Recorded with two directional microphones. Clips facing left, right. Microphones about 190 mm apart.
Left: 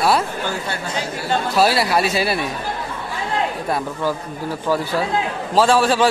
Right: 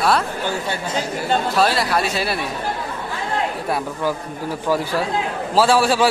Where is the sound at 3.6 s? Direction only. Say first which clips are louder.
Even; 10° right (ahead or behind).